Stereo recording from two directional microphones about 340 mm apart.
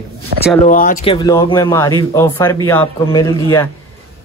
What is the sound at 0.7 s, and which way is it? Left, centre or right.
Speech, left.